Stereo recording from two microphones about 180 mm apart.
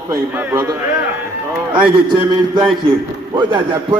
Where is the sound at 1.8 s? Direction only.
30° right (ahead or behind).